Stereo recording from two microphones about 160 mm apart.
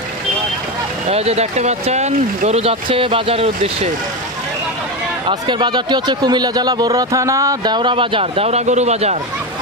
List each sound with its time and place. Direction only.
1.1 s speech: 40° right (ahead or behind)
5.3 s speech: 30° right (ahead or behind)